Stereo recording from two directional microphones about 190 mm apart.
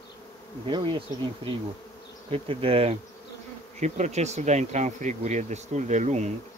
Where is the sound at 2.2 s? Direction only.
30° right (ahead or behind).